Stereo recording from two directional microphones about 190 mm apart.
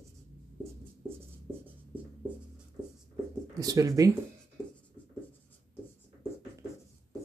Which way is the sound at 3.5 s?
20° right (ahead or behind).